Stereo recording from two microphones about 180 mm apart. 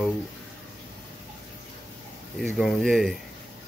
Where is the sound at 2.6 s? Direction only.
Centre (ahead or behind).